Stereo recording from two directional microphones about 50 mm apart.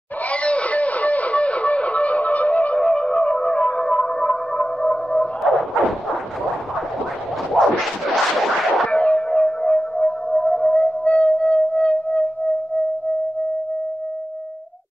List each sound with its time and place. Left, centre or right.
0.3 s music: left
5.4 s bow-wow: centre
8.4 s a sound: centre
8.9 s music: left